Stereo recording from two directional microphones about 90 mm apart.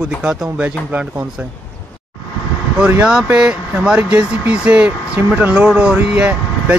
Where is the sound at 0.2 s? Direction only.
15° right (ahead or behind).